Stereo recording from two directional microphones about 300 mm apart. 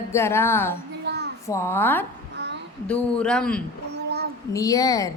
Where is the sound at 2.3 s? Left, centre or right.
Right.